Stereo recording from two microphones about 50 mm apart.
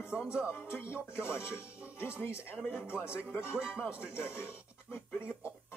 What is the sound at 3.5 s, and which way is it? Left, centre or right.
Speech, centre.